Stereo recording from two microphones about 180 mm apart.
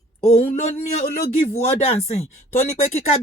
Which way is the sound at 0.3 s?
40° left (ahead or behind).